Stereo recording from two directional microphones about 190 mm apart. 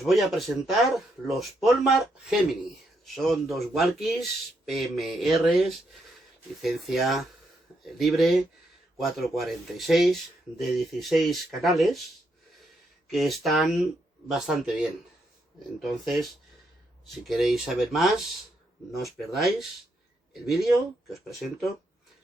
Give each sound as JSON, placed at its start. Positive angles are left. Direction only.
{"t": 0.0, "sound": "speech", "side_deg": 0}
{"t": 13.1, "sound": "speech", "side_deg": 0}
{"t": 19.3, "sound": "speech", "side_deg": 0}
{"t": 21.1, "sound": "speech", "side_deg": 0}